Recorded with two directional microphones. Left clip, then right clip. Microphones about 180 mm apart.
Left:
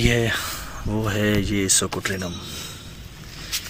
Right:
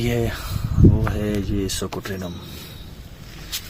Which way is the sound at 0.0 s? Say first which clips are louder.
Left 3 dB; 5° right (ahead or behind).